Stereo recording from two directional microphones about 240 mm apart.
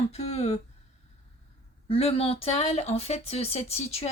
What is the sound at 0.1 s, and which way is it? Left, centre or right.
Speech, left.